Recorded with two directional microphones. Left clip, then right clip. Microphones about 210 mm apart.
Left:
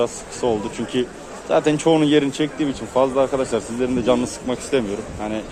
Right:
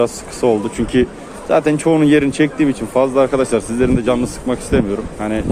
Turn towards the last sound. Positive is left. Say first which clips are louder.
# right 5 dB
turn(degrees=-10)  # may be behind; listen again after turning